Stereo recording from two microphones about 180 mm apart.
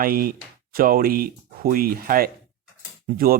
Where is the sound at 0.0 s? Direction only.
55° right (ahead or behind).